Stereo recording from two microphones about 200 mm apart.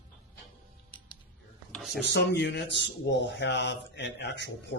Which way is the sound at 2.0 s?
60° left (ahead or behind).